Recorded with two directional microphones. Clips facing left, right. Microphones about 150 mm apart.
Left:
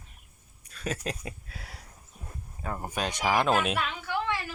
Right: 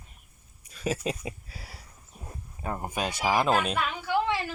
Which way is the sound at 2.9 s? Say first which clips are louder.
Even; 10° right (ahead or behind).